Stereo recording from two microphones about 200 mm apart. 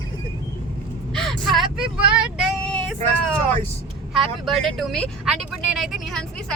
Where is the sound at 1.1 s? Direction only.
Centre (ahead or behind).